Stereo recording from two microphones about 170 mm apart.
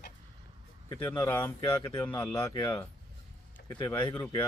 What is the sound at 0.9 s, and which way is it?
Speech, 10° left (ahead or behind).